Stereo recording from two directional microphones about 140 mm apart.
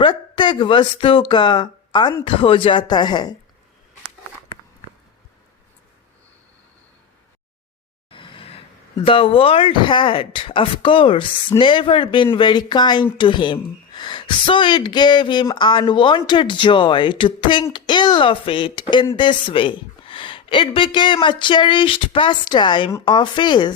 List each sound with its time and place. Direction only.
0.0 s a woman's voice: 30° left (ahead or behind)
8.1 s a woman's voice: 35° left (ahead or behind)